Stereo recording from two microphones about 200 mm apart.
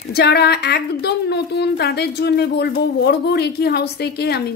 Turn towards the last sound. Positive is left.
turn(degrees=55)  # may be behind; listen again after turning